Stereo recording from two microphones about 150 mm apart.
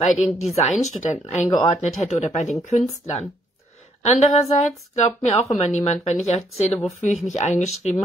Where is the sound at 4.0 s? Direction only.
45° left (ahead or behind).